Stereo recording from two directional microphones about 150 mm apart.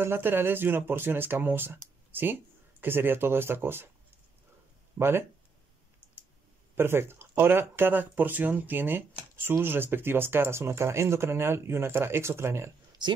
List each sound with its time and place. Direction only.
0.0 s speech: 15° right (ahead or behind)
4.9 s speech: 15° right (ahead or behind)
6.7 s speech: 15° right (ahead or behind)
13.0 s speech: 30° right (ahead or behind)